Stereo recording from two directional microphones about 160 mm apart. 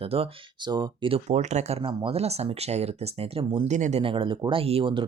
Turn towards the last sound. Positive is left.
turn(degrees=-30)  # may be behind; listen again after turning